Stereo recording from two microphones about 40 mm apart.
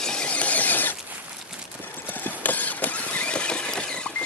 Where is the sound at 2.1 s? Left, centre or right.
Left.